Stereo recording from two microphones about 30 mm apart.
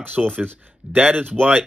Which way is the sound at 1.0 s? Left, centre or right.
Right.